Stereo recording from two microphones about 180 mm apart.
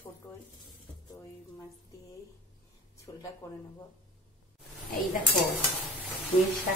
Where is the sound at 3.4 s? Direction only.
15° left (ahead or behind).